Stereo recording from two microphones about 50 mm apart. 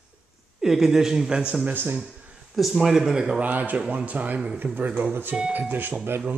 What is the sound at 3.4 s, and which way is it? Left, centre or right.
A man's voice, right.